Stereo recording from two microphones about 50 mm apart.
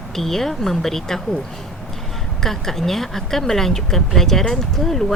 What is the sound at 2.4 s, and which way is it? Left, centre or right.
Speech, centre.